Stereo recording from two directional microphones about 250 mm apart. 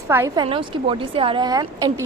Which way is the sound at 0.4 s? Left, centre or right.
Right.